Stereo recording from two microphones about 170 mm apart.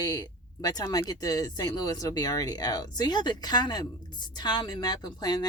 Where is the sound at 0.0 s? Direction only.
20° left (ahead or behind).